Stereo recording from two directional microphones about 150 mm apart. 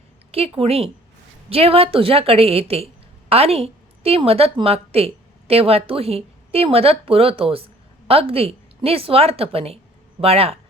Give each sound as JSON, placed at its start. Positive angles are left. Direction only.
{"t": 0.3, "sound": "a woman's voice", "side_deg": -40}